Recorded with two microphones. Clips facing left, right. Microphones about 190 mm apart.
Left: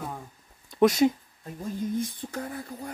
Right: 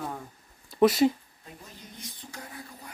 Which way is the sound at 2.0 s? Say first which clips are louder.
Left 12 dB; 50° left (ahead or behind).